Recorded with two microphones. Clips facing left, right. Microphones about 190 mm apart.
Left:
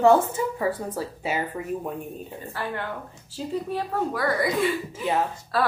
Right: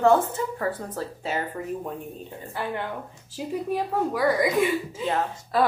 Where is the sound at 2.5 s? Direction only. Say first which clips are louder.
Right 1 dB; 20° right (ahead or behind).